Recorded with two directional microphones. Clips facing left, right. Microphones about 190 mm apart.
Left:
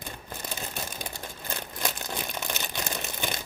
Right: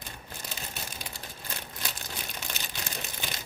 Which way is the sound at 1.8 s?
50° left (ahead or behind).